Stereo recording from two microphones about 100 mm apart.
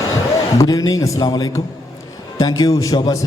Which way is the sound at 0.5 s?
40° left (ahead or behind).